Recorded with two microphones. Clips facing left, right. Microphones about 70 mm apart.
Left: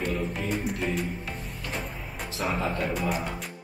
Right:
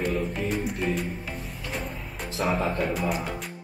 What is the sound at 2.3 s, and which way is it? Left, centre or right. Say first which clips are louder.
Speech: right 3 dB; centre.